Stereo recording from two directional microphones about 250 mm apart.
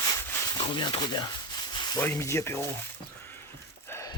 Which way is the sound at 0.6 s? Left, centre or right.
Centre.